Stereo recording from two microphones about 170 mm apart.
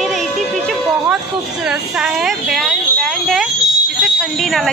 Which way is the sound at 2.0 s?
5° right (ahead or behind).